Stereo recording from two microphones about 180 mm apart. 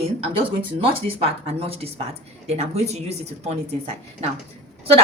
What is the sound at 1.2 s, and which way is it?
Speech, 35° right (ahead or behind).